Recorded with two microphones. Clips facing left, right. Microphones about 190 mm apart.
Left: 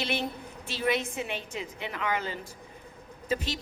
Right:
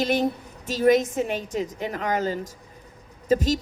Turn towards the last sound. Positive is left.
turn(degrees=-40)  # may be behind; listen again after turning